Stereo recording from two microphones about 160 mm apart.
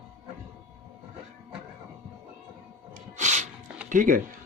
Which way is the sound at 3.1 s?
50° right (ahead or behind).